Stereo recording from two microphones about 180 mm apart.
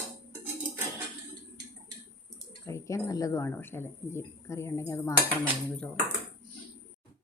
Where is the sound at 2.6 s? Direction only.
15° left (ahead or behind).